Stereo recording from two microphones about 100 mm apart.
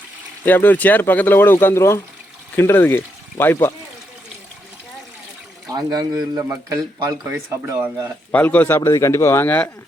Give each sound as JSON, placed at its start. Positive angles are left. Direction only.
{"t": 0.4, "sound": "speech", "side_deg": 20}
{"t": 5.7, "sound": "a man's voice", "side_deg": -40}
{"t": 8.3, "sound": "speech", "side_deg": 20}